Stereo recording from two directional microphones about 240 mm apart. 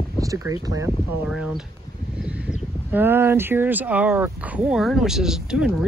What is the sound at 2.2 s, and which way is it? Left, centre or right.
Speech, centre.